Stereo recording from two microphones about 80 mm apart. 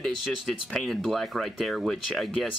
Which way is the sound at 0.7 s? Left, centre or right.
Centre.